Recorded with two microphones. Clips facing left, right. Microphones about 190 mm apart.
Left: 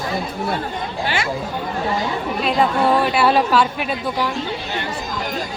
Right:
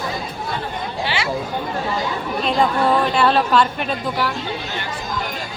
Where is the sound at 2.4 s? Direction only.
5° left (ahead or behind).